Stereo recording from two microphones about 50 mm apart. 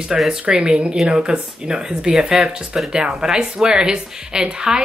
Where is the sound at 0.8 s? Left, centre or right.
Centre.